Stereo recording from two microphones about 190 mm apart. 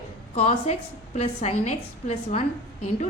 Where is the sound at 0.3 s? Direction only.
35° left (ahead or behind).